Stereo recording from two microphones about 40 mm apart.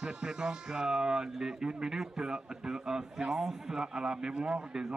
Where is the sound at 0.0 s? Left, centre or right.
Right.